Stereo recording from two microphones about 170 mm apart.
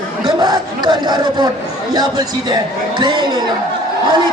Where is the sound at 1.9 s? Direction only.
25° right (ahead or behind).